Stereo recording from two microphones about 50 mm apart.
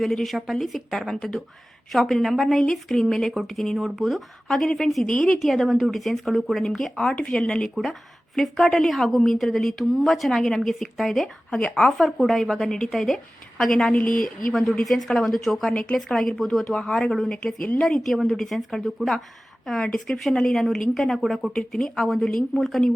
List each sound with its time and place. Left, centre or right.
0.0 s a woman's voice: centre
5.4 s a woman's voice: centre
11.5 s a woman's voice: centre
17.2 s a woman's voice: centre